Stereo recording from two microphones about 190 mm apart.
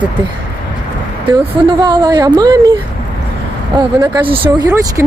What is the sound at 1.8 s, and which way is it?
Speech, 20° right (ahead or behind).